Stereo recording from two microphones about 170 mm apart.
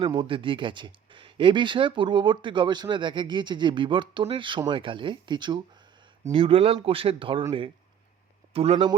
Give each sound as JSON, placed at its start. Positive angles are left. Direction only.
{"t": 0.0, "sound": "speech", "side_deg": -25}
{"t": 8.5, "sound": "speech", "side_deg": -35}